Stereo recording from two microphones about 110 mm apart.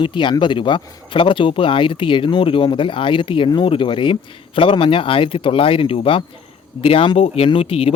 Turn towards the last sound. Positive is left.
turn(degrees=60)  # may be behind; listen again after turning